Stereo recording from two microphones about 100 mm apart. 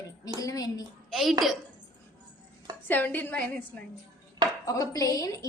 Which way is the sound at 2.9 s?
15° left (ahead or behind).